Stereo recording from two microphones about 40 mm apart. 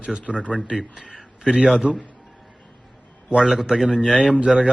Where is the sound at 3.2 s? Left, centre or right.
Right.